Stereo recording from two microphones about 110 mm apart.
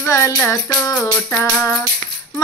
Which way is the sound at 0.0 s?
30° left (ahead or behind).